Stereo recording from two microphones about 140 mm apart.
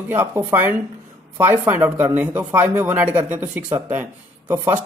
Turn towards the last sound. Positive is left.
turn(degrees=-15)  # may be behind; listen again after turning